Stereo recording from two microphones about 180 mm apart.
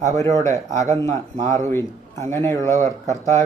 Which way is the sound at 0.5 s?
40° right (ahead or behind).